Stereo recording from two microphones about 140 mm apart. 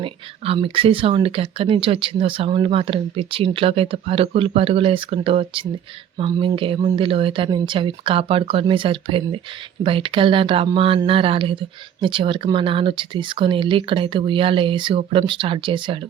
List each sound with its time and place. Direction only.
0.0 s speech: 40° right (ahead or behind)